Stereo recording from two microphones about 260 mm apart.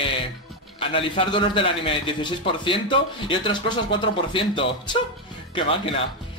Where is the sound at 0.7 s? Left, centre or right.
Left.